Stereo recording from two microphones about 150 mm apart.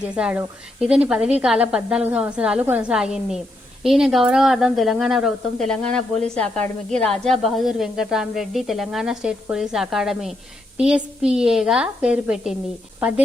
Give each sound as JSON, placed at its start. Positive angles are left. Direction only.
{"t": 0.0, "sound": "a woman's voice", "side_deg": -10}